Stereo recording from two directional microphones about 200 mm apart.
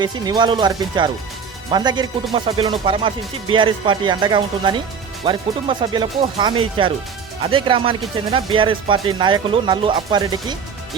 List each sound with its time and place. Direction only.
0.0 s speech: 20° right (ahead or behind)
7.5 s speech: 25° right (ahead or behind)